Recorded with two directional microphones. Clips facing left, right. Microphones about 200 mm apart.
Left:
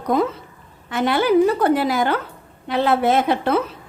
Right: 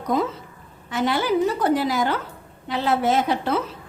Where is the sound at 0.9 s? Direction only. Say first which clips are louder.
Left 4 dB; 60° left (ahead or behind).